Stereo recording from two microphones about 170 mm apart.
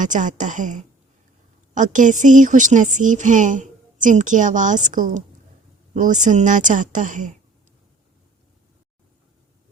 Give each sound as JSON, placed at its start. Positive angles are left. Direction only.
{"t": 0.0, "sound": "a woman's voice", "side_deg": -50}